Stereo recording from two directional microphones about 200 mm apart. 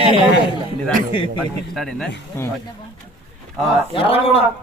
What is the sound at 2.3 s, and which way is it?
Speech, 15° left (ahead or behind).